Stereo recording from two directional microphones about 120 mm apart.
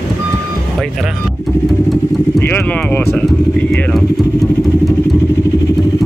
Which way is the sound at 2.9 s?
20° left (ahead or behind).